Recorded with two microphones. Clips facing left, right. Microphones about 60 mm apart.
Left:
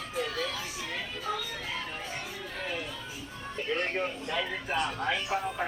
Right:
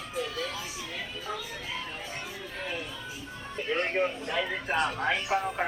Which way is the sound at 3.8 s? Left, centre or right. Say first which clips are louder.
Right 3 dB; centre.